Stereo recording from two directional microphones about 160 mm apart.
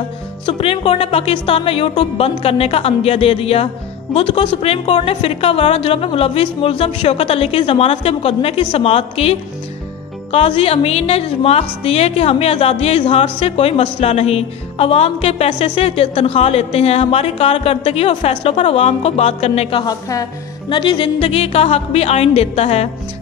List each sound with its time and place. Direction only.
0.5 s a woman's voice: 40° left (ahead or behind)
19.8 s a woman's voice: 25° left (ahead or behind); by 22.8 s 40° left (ahead or behind)